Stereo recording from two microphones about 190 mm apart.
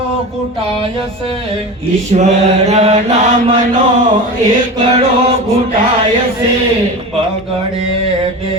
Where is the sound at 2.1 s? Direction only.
35° right (ahead or behind).